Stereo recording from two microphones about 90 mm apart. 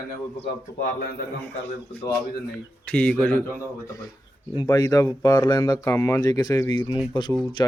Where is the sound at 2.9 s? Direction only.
15° left (ahead or behind).